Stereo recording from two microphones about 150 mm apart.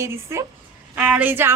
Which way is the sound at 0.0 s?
20° right (ahead or behind).